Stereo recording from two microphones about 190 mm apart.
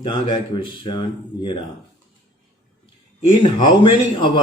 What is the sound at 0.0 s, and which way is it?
Speech, 25° left (ahead or behind).